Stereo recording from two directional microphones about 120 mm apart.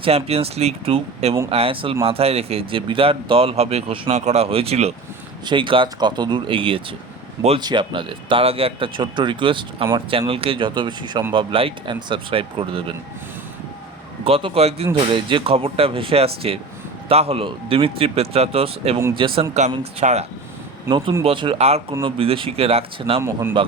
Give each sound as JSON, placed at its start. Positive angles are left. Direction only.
{"t": 0.0, "sound": "speech", "side_deg": -55}
{"t": 5.5, "sound": "speech", "side_deg": -45}
{"t": 14.3, "sound": "speech", "side_deg": -55}
{"t": 15.1, "sound": "speech", "side_deg": -45}
{"t": 19.1, "sound": "speech", "side_deg": -45}
{"t": 19.7, "sound": "speech", "side_deg": -60}
{"t": 20.9, "sound": "speech", "side_deg": -45}
{"t": 23.2, "sound": "speech", "side_deg": -20}